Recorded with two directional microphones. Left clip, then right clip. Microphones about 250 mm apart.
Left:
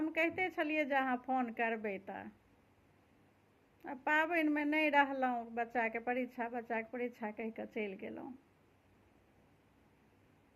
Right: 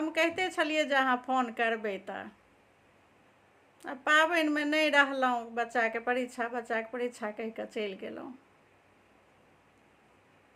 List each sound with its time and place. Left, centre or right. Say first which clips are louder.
0.0 s a woman's voice: right 6 dB; centre
3.8 s a woman's voice: right 8 dB; centre